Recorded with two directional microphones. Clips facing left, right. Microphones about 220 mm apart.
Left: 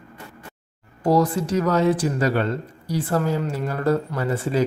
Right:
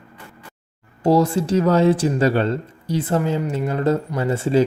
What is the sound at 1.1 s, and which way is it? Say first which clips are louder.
Speech: right 3 dB; 25° right (ahead or behind).